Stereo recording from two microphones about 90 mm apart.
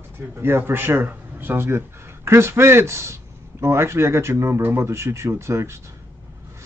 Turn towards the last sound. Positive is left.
turn(degrees=-30)  # may be behind; listen again after turning